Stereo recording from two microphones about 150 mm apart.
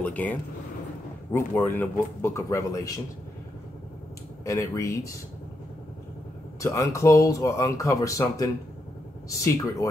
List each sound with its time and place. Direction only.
0.0 s speech: 10° left (ahead or behind)
4.5 s speech: 20° left (ahead or behind)
6.6 s speech: 20° left (ahead or behind)